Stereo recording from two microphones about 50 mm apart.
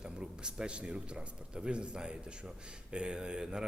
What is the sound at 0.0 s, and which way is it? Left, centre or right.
A man's voice, centre.